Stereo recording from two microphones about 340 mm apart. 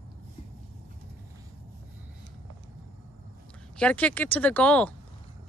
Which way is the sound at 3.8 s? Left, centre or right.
Centre.